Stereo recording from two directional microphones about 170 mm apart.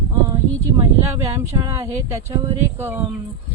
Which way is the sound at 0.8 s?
15° right (ahead or behind).